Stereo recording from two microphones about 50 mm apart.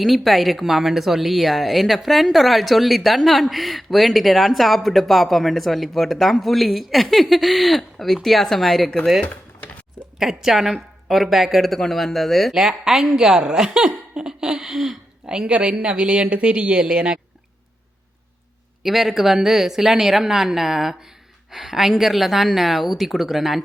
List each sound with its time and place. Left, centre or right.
0.0 s speech: centre
10.2 s speech: centre
15.3 s speech: right
18.8 s speech: centre